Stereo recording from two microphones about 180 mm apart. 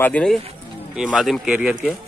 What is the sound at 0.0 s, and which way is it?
Speech, 5° left (ahead or behind).